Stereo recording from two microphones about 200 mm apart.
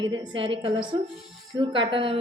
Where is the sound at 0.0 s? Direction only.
25° right (ahead or behind).